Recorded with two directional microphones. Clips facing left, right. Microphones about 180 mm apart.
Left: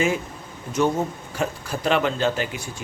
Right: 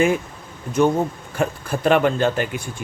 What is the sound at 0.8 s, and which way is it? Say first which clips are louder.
Speech: right 4 dB; 55° right (ahead or behind).